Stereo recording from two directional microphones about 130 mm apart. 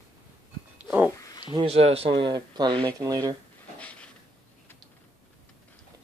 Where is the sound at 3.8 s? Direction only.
10° left (ahead or behind).